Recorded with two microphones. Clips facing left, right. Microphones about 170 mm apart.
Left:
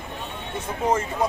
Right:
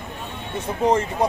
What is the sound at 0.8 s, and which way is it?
Speech, 35° right (ahead or behind).